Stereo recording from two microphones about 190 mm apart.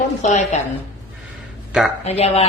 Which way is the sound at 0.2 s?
40° left (ahead or behind).